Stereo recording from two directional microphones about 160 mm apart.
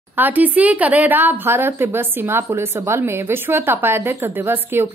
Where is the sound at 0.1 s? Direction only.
10° right (ahead or behind).